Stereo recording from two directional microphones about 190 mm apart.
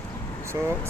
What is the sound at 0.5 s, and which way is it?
Speech, 15° right (ahead or behind).